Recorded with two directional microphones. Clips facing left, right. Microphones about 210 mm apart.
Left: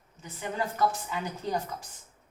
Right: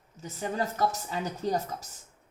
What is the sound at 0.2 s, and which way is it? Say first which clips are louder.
Speech: right 2 dB; 40° right (ahead or behind).